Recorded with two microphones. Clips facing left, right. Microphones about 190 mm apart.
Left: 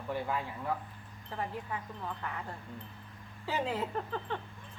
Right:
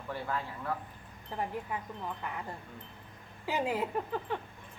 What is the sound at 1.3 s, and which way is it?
Speech, 15° right (ahead or behind).